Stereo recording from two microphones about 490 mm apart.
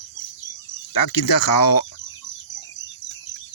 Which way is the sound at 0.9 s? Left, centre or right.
Left.